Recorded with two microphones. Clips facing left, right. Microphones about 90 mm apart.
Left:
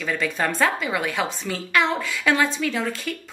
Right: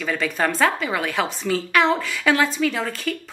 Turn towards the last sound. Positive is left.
turn(degrees=0)  # may be behind; listen again after turning